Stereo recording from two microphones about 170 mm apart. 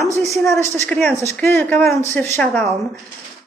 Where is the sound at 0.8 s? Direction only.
5° left (ahead or behind).